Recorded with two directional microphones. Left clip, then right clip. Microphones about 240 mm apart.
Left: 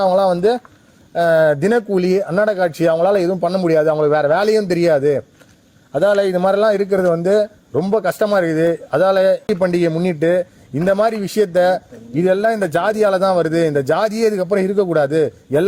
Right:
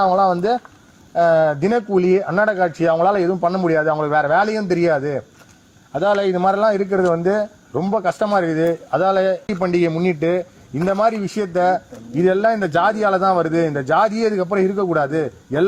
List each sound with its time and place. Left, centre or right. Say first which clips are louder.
0.0 s a man's voice: left 2 dB; left